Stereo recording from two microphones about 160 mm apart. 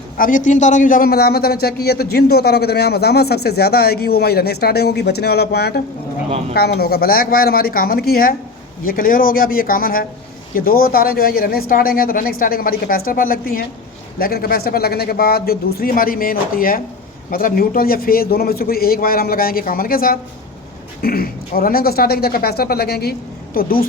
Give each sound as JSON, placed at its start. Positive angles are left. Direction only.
{"t": 0.2, "sound": "a man's voice", "side_deg": 55}
{"t": 23.6, "sound": "speech", "side_deg": 65}